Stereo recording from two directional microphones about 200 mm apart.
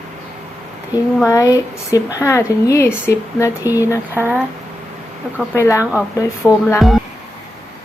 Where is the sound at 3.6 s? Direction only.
10° right (ahead or behind).